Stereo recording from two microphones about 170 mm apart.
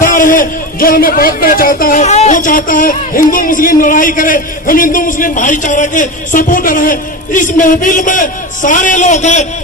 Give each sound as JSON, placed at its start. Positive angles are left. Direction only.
{"t": 0.0, "sound": "a man's voice", "side_deg": 50}